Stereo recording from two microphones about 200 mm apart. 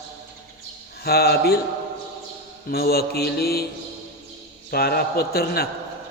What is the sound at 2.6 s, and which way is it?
Mantra, 50° left (ahead or behind).